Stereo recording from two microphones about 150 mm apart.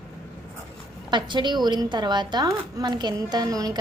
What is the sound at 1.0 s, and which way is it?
Speech, 30° right (ahead or behind).